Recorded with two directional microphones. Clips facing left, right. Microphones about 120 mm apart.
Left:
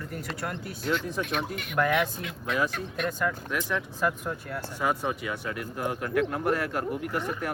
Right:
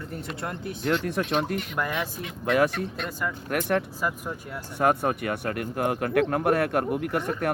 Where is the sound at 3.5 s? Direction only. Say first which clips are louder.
Right 5 dB; 60° right (ahead or behind).